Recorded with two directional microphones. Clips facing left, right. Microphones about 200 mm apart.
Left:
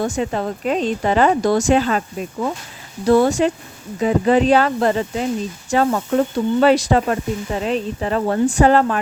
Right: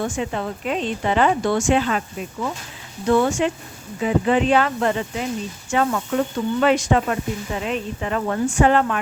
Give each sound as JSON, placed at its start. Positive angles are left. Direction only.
{"t": 0.0, "sound": "speech", "side_deg": 40}